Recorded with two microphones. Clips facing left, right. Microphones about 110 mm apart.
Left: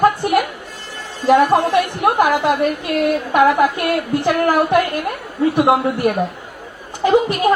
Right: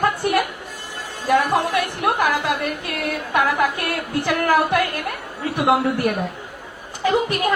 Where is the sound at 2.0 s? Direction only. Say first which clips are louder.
Left 4 dB; 25° left (ahead or behind).